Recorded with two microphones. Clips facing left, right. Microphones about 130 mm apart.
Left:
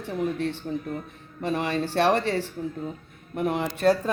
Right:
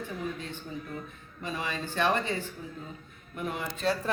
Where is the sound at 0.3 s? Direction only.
70° left (ahead or behind).